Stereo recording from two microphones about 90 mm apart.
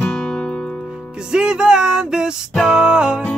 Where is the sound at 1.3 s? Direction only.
10° right (ahead or behind).